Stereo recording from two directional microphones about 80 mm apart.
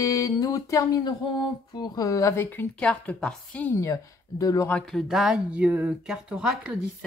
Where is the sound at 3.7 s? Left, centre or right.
Left.